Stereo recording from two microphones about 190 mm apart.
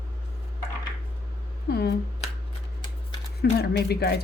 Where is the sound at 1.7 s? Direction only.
60° left (ahead or behind).